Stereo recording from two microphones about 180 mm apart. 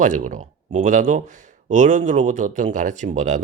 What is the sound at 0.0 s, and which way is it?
Speech, 45° right (ahead or behind).